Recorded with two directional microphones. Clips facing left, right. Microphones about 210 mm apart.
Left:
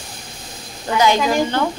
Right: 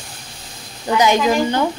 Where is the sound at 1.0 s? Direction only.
15° right (ahead or behind).